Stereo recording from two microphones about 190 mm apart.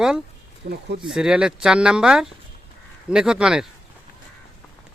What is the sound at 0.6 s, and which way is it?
Speech, 65° right (ahead or behind).